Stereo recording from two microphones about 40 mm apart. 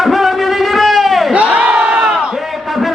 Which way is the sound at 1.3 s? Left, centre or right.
Right.